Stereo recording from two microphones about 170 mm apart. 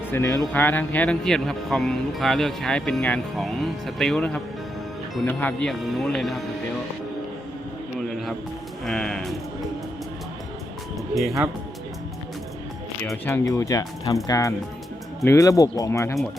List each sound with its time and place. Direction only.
0.1 s speech: 15° left (ahead or behind); by 6.4 s centre (ahead or behind)
7.9 s music: centre (ahead or behind)
8.8 s speech: 5° left (ahead or behind)
13.2 s speech: 15° left (ahead or behind)